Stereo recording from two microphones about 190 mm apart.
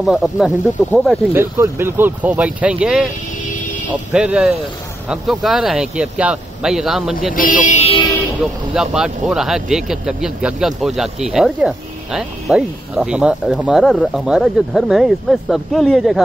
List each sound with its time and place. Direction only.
0.0 s speech: centre (ahead or behind)
1.3 s speech: 10° right (ahead or behind)
4.1 s speech: 5° right (ahead or behind)
7.3 s speech: 45° left (ahead or behind)
8.7 s speech: 5° right (ahead or behind)